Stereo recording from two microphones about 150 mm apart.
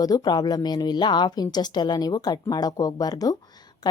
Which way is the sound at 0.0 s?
25° left (ahead or behind).